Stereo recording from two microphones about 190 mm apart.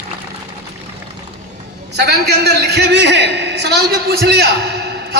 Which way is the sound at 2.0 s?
60° right (ahead or behind).